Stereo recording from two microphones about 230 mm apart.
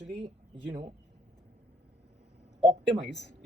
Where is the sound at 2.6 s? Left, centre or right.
Right.